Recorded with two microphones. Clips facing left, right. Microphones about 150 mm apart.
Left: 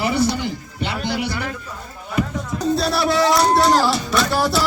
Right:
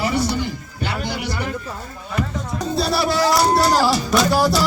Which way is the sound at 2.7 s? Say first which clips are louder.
Left 1 dB; centre (ahead or behind).